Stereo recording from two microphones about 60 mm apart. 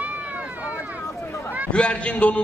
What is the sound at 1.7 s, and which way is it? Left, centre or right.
Speech, centre.